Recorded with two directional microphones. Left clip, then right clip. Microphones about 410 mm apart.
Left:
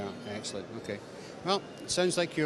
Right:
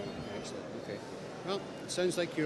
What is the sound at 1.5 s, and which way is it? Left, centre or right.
Speech, left.